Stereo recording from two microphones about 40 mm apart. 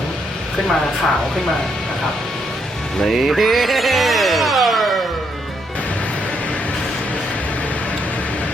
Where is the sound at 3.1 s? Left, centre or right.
Centre.